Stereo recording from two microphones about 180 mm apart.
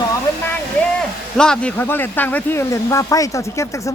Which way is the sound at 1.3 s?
5° left (ahead or behind).